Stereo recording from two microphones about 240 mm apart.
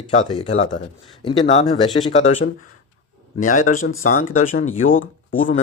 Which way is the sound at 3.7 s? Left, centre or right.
Left.